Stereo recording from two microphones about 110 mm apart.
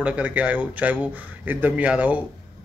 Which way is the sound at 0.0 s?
10° right (ahead or behind).